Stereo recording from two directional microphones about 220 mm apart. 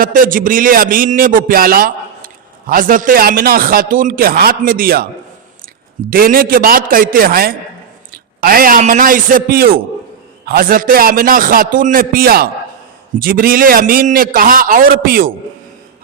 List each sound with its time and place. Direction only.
0.0 s a man's voice: 40° right (ahead or behind)
6.1 s a man's voice: 40° right (ahead or behind)